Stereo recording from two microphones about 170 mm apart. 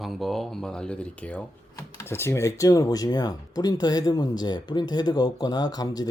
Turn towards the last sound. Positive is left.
turn(degrees=20)  # may be behind; listen again after turning